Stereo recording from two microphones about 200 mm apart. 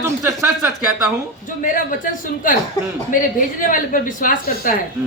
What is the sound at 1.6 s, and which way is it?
Speech, 40° left (ahead or behind).